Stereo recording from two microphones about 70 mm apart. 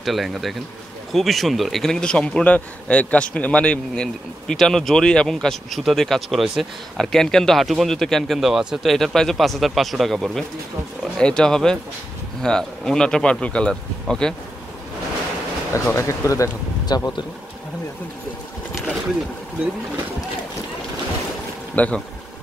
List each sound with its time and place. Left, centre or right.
0.0 s speech: centre
15.7 s speech: left
16.8 s a man's voice: left
21.7 s speech: left